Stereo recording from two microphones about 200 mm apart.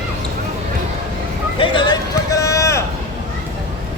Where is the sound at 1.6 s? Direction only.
25° left (ahead or behind).